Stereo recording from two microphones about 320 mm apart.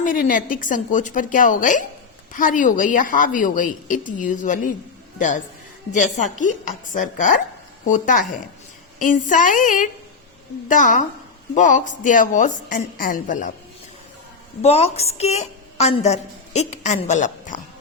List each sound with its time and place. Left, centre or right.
0.0 s a woman's voice: left
5.9 s a woman's voice: left
14.6 s a woman's voice: centre